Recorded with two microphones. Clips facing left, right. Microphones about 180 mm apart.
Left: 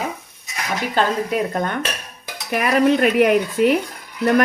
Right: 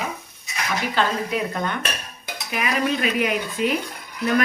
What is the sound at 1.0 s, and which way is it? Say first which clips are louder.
Speech: left 5 dB; 40° left (ahead or behind).